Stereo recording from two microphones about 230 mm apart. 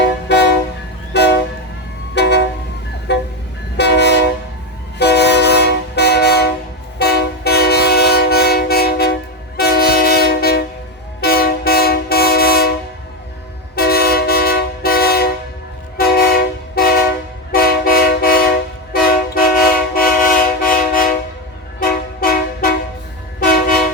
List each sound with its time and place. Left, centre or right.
0.0 s train: left
3.1 s music: left
3.8 s train: left
13.7 s train: left
17.5 s vehicle: left